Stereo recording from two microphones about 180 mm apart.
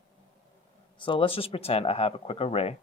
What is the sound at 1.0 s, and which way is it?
Speech, 30° left (ahead or behind).